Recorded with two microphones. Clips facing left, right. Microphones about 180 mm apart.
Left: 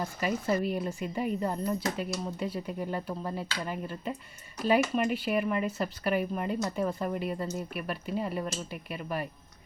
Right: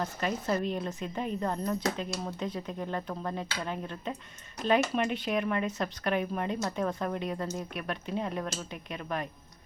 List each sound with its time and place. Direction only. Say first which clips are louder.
0.0 s speech: left 1 dB; 5° left (ahead or behind)